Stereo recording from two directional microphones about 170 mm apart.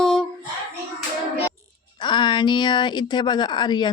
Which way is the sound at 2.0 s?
25° left (ahead or behind).